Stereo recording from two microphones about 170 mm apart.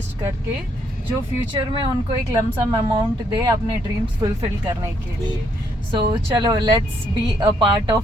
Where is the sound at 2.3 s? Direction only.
25° right (ahead or behind).